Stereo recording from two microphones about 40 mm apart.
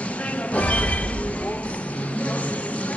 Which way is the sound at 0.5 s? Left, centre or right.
Left.